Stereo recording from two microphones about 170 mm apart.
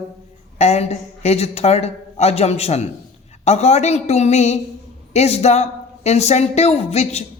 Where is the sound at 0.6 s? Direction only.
40° left (ahead or behind).